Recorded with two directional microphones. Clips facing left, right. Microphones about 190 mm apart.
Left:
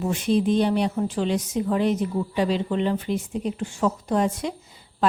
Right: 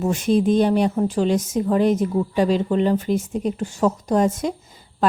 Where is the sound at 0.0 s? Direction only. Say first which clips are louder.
Right 3 dB; 45° right (ahead or behind).